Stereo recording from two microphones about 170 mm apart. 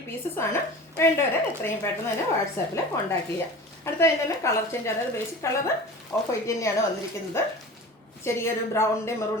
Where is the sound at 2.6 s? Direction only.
15° left (ahead or behind).